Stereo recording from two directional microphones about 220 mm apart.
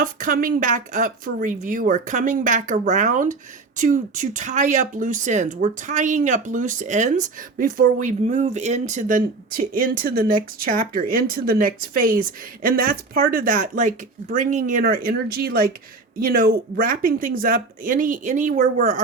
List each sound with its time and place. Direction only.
0.0 s speech: 40° right (ahead or behind)